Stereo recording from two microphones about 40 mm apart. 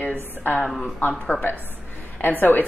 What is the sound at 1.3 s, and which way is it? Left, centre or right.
Speech, left.